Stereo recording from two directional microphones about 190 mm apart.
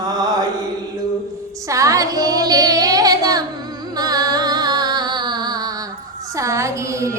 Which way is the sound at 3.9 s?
20° right (ahead or behind).